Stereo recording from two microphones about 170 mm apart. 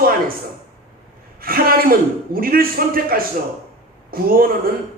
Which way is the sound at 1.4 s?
60° right (ahead or behind).